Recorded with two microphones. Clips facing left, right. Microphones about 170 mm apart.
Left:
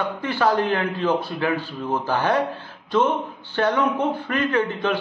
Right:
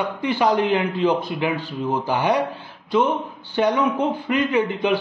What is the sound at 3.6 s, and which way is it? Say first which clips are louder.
A man's voice: right 1 dB; 15° right (ahead or behind).